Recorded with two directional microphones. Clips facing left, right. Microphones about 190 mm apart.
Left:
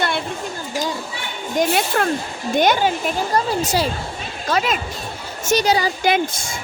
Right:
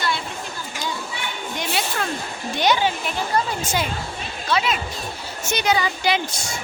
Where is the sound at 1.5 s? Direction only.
50° left (ahead or behind).